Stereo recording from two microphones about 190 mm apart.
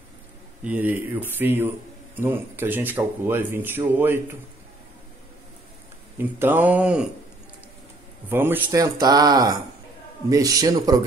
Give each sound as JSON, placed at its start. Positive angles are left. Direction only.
{"t": 0.7, "sound": "speech", "side_deg": -10}
{"t": 6.1, "sound": "speech", "side_deg": -10}
{"t": 8.3, "sound": "speech", "side_deg": -10}